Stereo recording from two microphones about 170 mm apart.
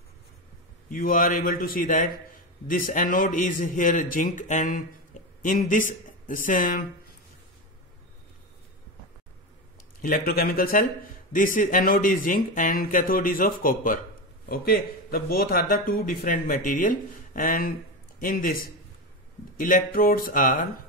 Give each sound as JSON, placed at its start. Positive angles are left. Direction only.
{"t": 0.8, "sound": "a man's voice", "side_deg": 55}
{"t": 10.0, "sound": "a man's voice", "side_deg": 60}